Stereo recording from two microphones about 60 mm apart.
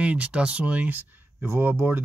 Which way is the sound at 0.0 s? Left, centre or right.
Right.